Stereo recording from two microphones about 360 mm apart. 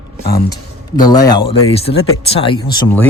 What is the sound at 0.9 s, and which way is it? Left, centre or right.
Speech, centre.